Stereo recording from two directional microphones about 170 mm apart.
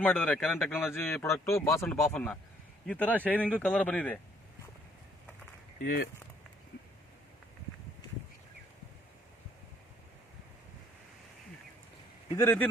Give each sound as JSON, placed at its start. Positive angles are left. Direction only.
{"t": 0.0, "sound": "a man's voice", "side_deg": 10}
{"t": 1.8, "sound": "a man's voice", "side_deg": 5}
{"t": 5.8, "sound": "speech", "side_deg": 70}
{"t": 12.4, "sound": "a man's voice", "side_deg": 15}